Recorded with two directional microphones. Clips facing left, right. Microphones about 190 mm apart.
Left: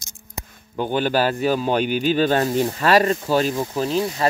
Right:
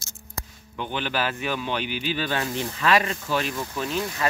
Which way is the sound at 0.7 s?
40° left (ahead or behind).